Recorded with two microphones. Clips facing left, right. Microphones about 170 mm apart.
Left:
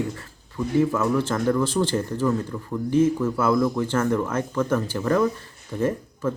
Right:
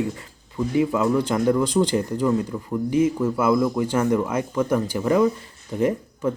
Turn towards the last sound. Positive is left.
turn(degrees=-15)  # may be behind; listen again after turning